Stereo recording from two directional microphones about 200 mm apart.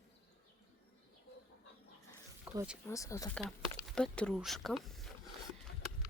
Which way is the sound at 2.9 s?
15° left (ahead or behind).